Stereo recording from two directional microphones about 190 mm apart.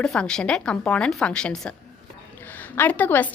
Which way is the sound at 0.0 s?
5° left (ahead or behind).